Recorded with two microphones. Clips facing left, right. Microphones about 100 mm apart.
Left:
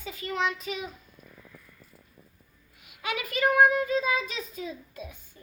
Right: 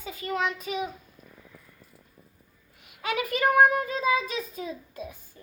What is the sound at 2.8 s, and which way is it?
A child's voice, 35° right (ahead or behind).